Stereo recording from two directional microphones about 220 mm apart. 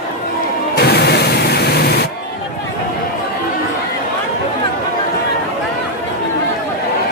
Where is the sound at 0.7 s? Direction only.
45° left (ahead or behind).